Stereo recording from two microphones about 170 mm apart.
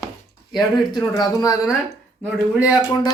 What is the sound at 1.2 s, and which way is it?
Speech, 20° left (ahead or behind).